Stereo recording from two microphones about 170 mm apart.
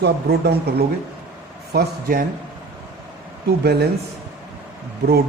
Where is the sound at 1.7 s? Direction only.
65° right (ahead or behind).